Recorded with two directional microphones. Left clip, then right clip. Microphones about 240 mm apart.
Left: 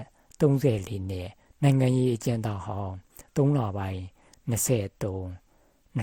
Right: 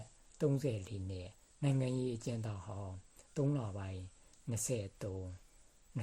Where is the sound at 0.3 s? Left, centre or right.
Left.